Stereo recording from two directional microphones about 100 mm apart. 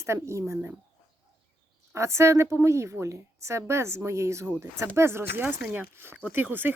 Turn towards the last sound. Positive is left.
turn(degrees=-20)  # may be behind; listen again after turning